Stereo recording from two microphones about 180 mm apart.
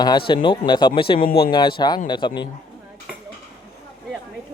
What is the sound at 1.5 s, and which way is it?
Speech, 25° left (ahead or behind).